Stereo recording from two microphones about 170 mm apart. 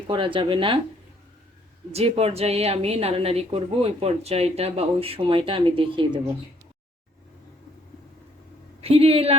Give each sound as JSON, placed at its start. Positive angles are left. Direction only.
{"t": 0.1, "sound": "speech", "side_deg": -30}
{"t": 1.9, "sound": "a woman's voice", "side_deg": -35}
{"t": 8.8, "sound": "a woman's voice", "side_deg": -35}